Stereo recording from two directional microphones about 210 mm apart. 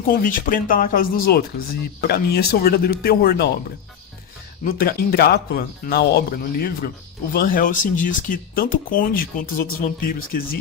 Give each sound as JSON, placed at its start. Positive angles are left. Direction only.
{"t": 0.0, "sound": "speech", "side_deg": 40}
{"t": 4.6, "sound": "speech", "side_deg": 45}